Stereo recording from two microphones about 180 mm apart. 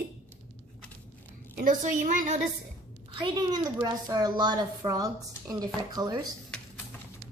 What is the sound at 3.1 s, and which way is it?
A woman's voice, 25° right (ahead or behind).